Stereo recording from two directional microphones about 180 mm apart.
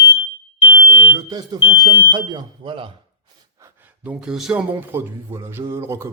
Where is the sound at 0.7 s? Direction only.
15° right (ahead or behind).